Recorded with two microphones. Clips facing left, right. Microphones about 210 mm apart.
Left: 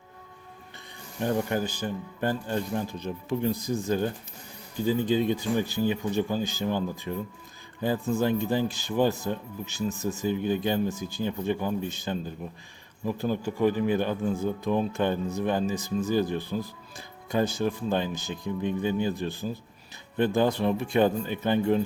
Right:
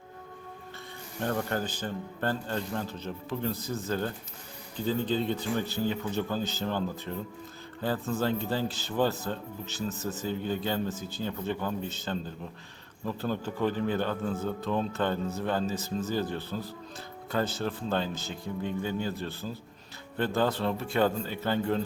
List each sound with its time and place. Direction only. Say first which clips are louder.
1.2 s speech: left 4 dB; 15° left (ahead or behind)